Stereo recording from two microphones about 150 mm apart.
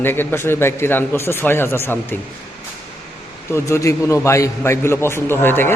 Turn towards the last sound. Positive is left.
turn(degrees=15)  # may be behind; listen again after turning